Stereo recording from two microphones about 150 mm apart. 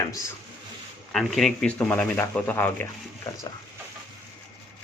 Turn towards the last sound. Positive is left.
turn(degrees=15)  # may be behind; listen again after turning